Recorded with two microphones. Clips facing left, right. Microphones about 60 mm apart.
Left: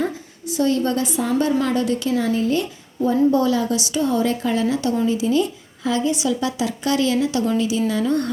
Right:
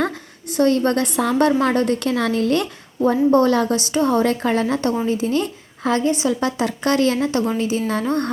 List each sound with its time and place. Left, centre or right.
0.5 s a woman's voice: right
1.5 s a woman's voice: right